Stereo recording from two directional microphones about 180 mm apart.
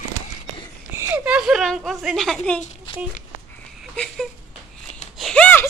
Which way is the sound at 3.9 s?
5° left (ahead or behind).